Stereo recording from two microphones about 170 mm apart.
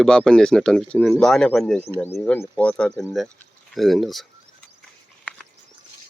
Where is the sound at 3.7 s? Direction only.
Centre (ahead or behind).